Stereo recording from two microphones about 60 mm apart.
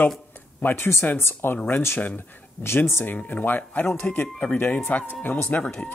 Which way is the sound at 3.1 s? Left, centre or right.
Left.